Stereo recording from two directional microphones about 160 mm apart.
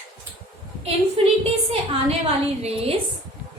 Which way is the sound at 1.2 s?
35° right (ahead or behind).